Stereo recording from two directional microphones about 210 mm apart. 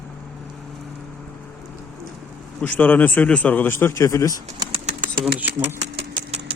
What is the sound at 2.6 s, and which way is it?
A man's voice, 5° left (ahead or behind).